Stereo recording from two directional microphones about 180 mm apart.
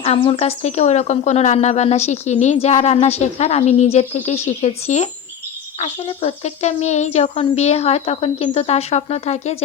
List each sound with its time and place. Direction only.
0.0 s speech: 35° left (ahead or behind)